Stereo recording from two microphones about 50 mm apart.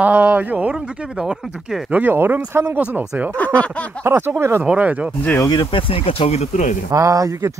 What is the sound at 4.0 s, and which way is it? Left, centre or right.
Speech, right.